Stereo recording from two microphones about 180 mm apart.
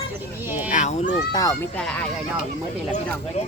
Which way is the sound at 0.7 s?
45° left (ahead or behind).